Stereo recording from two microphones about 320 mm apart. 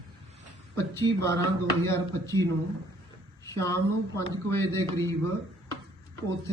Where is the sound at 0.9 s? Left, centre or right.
Centre.